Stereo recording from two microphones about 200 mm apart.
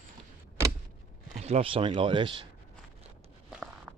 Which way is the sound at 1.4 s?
30° right (ahead or behind).